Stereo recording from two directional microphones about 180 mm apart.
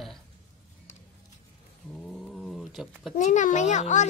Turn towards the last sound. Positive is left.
turn(degrees=40)  # may be behind; listen again after turning